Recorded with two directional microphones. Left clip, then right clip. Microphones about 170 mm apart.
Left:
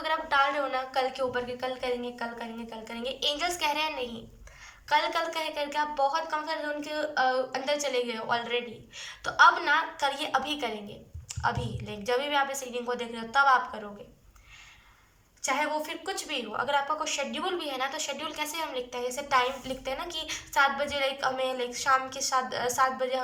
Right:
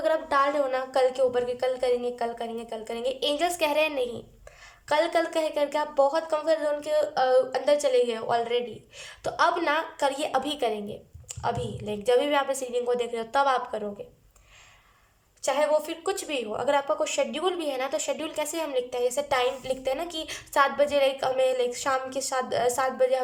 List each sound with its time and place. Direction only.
0.0 s speech: 40° right (ahead or behind)
15.4 s speech: 50° right (ahead or behind)